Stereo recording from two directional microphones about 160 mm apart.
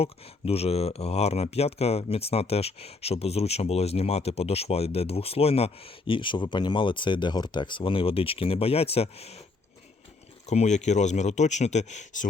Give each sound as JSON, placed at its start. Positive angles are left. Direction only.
{"t": 0.0, "sound": "speech", "side_deg": 40}
{"t": 10.4, "sound": "speech", "side_deg": 45}